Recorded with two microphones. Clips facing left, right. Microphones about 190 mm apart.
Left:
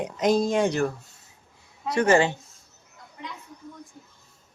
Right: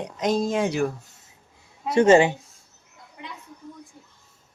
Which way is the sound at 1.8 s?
25° right (ahead or behind).